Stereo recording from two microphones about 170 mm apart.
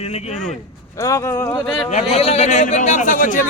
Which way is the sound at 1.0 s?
20° left (ahead or behind).